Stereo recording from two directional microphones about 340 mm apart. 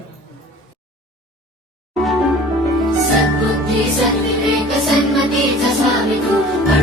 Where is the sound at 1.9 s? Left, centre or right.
Centre.